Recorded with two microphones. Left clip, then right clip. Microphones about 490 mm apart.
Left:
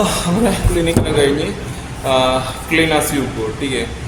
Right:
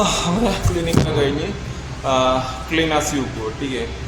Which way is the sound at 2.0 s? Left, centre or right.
Right.